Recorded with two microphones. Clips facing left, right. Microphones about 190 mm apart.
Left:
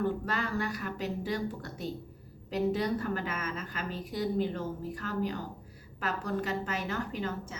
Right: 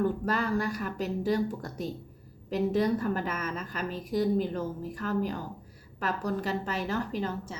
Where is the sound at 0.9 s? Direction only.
40° right (ahead or behind).